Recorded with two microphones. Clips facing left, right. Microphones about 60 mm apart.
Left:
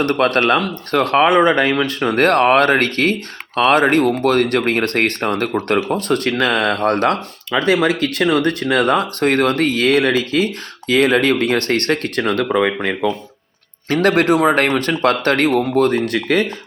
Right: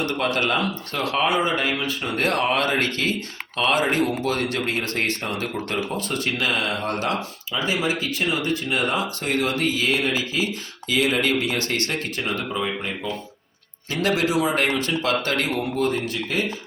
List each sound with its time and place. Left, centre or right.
0.0 s speech: left
13.9 s speech: left